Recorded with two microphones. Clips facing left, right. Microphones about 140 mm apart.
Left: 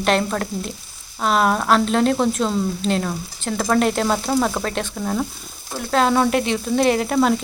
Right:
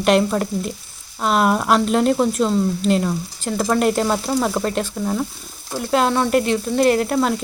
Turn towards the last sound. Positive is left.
turn(degrees=0)  # may be behind; listen again after turning